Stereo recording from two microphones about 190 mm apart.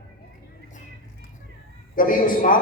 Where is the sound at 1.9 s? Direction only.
45° left (ahead or behind).